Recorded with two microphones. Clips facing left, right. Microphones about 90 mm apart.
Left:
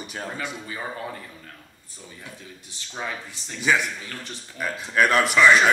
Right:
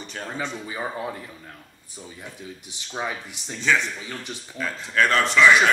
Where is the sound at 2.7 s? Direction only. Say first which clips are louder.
Right 2 dB; 15° right (ahead or behind).